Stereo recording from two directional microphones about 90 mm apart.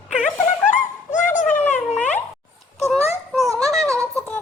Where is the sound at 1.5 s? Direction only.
20° left (ahead or behind).